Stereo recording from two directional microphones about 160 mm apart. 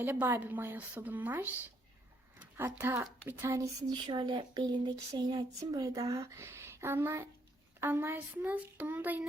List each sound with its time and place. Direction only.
0.0 s a woman's voice: 15° right (ahead or behind)